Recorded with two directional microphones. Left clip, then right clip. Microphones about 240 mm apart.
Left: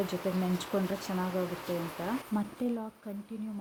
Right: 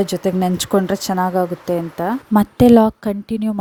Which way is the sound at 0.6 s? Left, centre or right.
Right.